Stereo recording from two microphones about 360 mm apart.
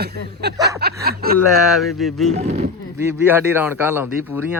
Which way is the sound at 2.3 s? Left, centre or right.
Centre.